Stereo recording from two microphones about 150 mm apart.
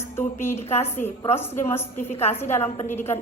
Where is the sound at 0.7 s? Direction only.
15° left (ahead or behind).